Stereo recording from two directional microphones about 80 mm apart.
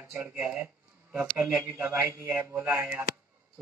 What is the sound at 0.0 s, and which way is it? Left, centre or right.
Speech, right.